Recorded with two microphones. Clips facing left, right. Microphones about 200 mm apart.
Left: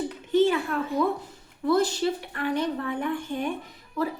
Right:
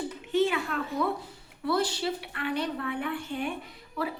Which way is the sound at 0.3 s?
40° left (ahead or behind).